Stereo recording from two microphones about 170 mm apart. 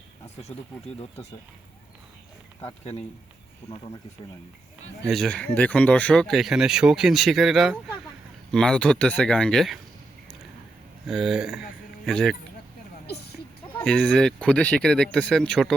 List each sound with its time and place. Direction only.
3.6 s speech: 20° left (ahead or behind)
5.0 s speech: centre (ahead or behind)
11.0 s speech: centre (ahead or behind)
13.8 s speech: 5° left (ahead or behind)